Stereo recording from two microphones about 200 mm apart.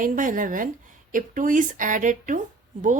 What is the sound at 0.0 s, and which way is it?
A woman's voice, 40° right (ahead or behind).